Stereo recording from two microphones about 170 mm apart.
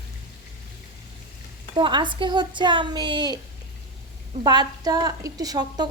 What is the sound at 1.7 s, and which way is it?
A woman's voice, 25° right (ahead or behind).